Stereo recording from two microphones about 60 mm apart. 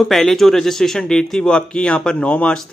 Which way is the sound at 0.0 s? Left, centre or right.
Centre.